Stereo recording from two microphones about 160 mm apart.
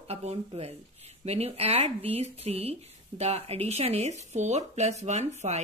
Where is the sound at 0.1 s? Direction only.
40° right (ahead or behind).